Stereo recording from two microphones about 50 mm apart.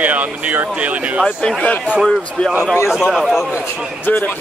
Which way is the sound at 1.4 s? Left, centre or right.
Left.